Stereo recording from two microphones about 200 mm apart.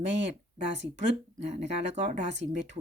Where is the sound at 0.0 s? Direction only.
65° right (ahead or behind).